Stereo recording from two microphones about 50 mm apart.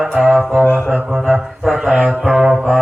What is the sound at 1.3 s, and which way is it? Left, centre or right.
Music, centre.